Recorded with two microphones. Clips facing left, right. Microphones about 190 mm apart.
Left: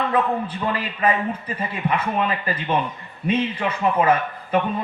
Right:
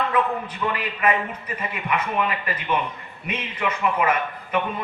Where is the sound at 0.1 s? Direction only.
30° left (ahead or behind).